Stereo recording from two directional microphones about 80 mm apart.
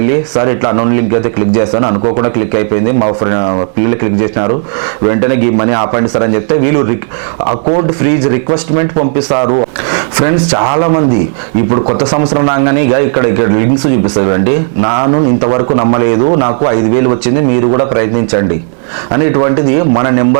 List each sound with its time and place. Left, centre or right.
0.0 s a man's voice: centre
10.2 s a man's voice: centre